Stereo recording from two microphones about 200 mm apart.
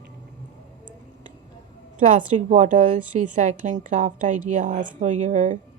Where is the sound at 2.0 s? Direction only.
40° right (ahead or behind).